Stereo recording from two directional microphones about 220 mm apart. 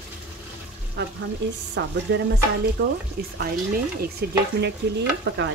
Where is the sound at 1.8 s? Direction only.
55° right (ahead or behind).